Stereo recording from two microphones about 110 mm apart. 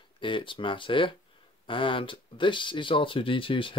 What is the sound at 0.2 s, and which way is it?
Speech, 50° left (ahead or behind).